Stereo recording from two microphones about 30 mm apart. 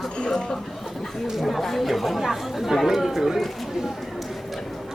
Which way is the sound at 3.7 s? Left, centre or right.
Centre.